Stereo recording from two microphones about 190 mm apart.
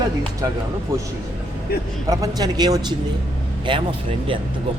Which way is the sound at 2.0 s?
20° right (ahead or behind).